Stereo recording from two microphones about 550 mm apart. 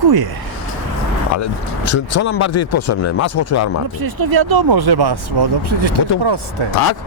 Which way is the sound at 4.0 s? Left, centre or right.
Right.